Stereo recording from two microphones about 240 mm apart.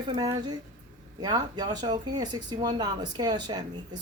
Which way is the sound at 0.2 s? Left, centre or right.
Centre.